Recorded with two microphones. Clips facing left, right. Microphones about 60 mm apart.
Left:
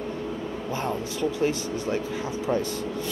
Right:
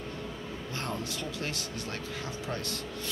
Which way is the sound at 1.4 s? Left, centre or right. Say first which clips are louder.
Left 11 dB; centre.